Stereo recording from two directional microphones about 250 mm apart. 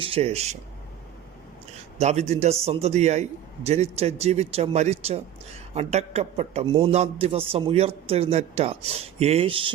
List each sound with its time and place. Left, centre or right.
0.0 s a man's voice: right
2.0 s a man's voice: right